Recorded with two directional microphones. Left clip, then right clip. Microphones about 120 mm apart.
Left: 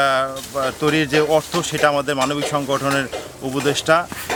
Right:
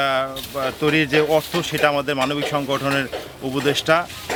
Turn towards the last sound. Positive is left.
turn(degrees=0)  # may be behind; listen again after turning